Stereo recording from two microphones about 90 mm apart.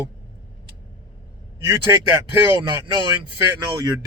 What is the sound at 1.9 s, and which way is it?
Speech, 35° right (ahead or behind).